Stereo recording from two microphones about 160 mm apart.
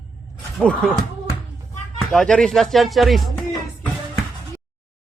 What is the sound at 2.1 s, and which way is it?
Speech, 5° left (ahead or behind).